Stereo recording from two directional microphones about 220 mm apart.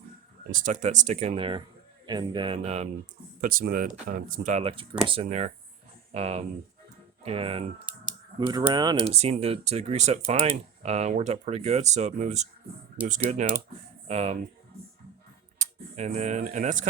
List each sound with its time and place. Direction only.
0.5 s speech: 35° right (ahead or behind)
3.4 s speech: 40° right (ahead or behind)
15.5 s speech: 30° right (ahead or behind)